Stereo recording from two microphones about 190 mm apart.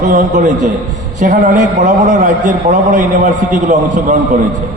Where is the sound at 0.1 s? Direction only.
40° right (ahead or behind).